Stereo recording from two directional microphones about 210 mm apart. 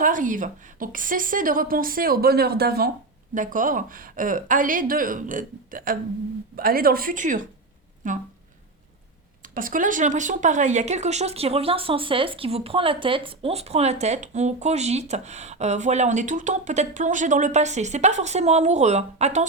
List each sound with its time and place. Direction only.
0.0 s a woman's voice: 40° right (ahead or behind)
9.4 s speech: 40° right (ahead or behind)